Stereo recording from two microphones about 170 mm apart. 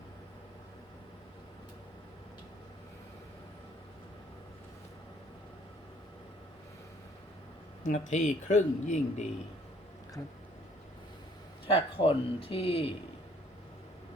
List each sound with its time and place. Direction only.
7.9 s speech: 45° left (ahead or behind)
11.6 s speech: 30° left (ahead or behind)